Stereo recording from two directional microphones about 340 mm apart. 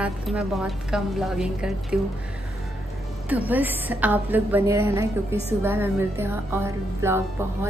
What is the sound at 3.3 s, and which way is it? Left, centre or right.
A man's voice, centre.